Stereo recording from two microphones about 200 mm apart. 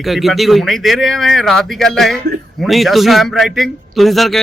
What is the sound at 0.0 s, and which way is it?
A man's voice, centre (ahead or behind).